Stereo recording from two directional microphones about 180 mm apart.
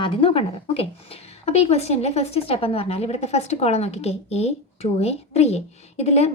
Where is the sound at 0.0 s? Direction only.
30° left (ahead or behind).